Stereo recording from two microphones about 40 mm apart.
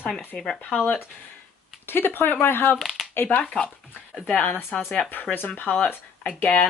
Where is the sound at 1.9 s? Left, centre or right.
Left.